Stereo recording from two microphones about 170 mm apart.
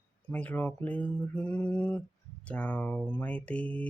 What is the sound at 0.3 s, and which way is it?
Mantra, 10° left (ahead or behind).